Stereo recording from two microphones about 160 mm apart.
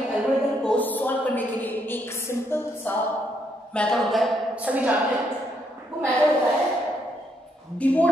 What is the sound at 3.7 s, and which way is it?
A woman's voice, 5° left (ahead or behind).